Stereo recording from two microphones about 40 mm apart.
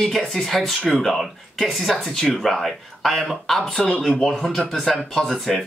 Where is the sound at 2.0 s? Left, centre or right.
Centre.